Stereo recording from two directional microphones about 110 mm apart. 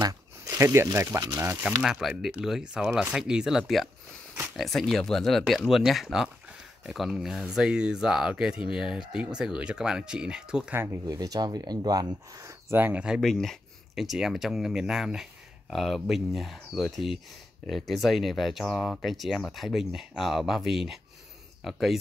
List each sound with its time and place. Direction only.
0.0 s a sound: 30° right (ahead or behind)
0.9 s speech: 25° right (ahead or behind)
1.8 s speech: 5° right (ahead or behind)
10.7 s speech: 20° right (ahead or behind)
11.1 s speech: 35° right (ahead or behind); by 13.0 s 20° right (ahead or behind)
13.2 s speech: 5° left (ahead or behind)